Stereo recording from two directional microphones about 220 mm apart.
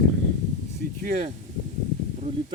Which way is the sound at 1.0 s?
35° right (ahead or behind).